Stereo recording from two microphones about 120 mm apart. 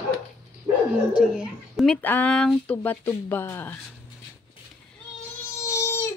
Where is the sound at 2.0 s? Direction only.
15° left (ahead or behind).